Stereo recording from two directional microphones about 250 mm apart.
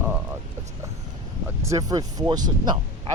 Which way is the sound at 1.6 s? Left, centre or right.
Centre.